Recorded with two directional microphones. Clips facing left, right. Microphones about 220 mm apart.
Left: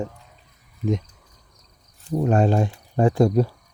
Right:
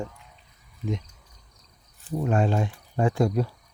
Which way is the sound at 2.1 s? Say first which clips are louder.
Left 5 dB; 40° left (ahead or behind).